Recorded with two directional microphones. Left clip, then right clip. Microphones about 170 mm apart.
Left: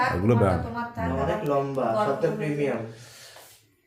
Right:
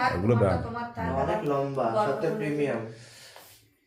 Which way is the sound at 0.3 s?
20° left (ahead or behind).